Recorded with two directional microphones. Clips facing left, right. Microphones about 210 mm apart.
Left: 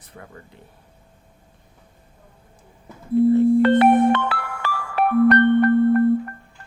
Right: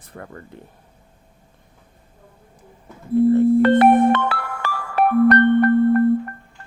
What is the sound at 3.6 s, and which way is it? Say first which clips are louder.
Music: right 1 dB; 45° right (ahead or behind).